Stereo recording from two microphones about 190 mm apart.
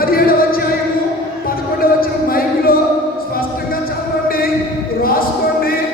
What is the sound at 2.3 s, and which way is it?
Music, 50° left (ahead or behind).